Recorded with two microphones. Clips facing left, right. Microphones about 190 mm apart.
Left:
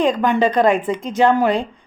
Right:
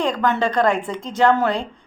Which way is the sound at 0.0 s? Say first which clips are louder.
Left 4 dB; 15° left (ahead or behind).